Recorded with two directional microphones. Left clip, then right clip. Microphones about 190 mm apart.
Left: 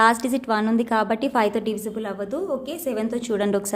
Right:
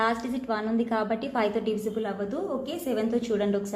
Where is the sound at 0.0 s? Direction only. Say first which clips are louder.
Left 9 dB; 45° left (ahead or behind).